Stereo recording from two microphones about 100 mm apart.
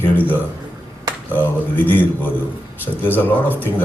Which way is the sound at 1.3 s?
20° left (ahead or behind).